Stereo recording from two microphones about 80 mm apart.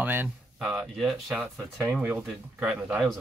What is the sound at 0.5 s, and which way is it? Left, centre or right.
Speech, centre.